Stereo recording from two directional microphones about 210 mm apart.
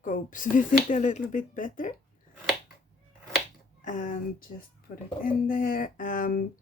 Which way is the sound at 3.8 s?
35° left (ahead or behind).